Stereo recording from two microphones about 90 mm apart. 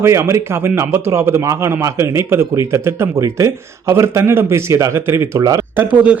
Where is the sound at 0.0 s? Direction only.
30° right (ahead or behind).